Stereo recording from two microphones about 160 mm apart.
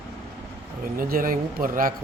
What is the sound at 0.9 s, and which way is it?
Speech, 60° right (ahead or behind).